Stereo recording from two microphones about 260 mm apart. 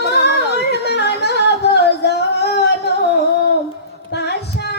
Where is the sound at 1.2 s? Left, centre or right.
Left.